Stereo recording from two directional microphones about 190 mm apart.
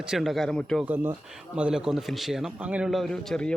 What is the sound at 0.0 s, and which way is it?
Speech, centre (ahead or behind).